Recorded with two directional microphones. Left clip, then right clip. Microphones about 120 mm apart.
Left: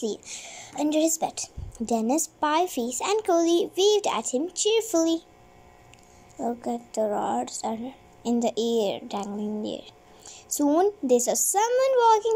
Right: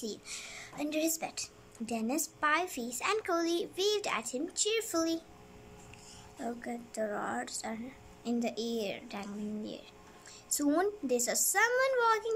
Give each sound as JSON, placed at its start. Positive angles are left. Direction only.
{"t": 0.0, "sound": "speech", "side_deg": 25}
{"t": 6.4, "sound": "speech", "side_deg": 25}